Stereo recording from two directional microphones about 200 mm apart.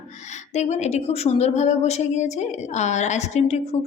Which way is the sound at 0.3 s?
35° left (ahead or behind).